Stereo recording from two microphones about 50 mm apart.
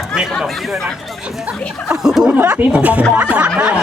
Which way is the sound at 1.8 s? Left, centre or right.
Centre.